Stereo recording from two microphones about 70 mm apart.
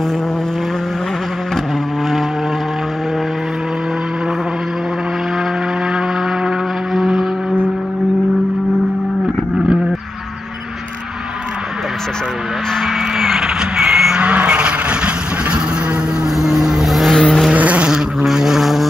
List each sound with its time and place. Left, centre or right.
6.9 s vehicle: centre
13.2 s vehicle: centre
14.2 s vehicle: centre
16.3 s vehicle: centre
17.5 s a sound: centre
18.2 s vehicle: centre